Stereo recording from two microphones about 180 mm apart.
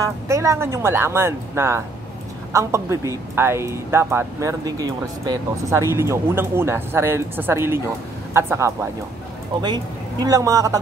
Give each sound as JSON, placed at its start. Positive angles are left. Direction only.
{"t": 0.0, "sound": "speech", "side_deg": -15}
{"t": 10.2, "sound": "a woman's voice", "side_deg": -20}